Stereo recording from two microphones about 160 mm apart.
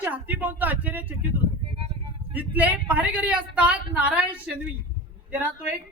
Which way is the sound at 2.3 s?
10° right (ahead or behind).